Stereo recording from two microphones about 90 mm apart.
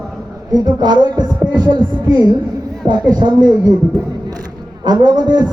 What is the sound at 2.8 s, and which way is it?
Speech, 55° right (ahead or behind).